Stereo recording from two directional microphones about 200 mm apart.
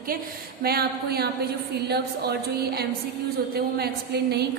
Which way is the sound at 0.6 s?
50° right (ahead or behind).